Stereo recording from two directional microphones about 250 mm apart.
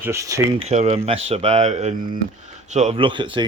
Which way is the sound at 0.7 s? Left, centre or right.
Right.